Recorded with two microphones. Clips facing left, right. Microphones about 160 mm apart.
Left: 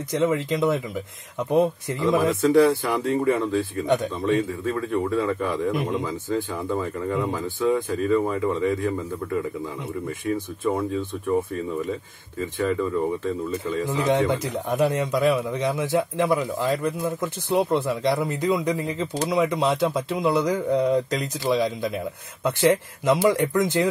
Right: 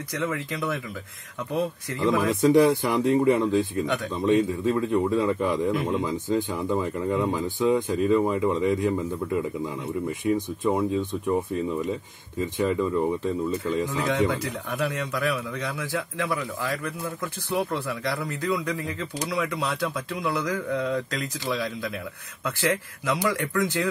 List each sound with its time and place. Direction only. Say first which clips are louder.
0.1 s a man's voice: left 7 dB; 20° left (ahead or behind)
1.9 s a man's voice: left 2 dB; 20° left (ahead or behind)
2.4 s speech: right 1 dB; 20° right (ahead or behind)
3.8 s a man's voice: left 5 dB; 20° left (ahead or behind)
4.3 s speech: right 3 dB; 20° right (ahead or behind)
13.2 s speech: even; 15° right (ahead or behind)
13.8 s a man's voice: left 6 dB; 20° left (ahead or behind)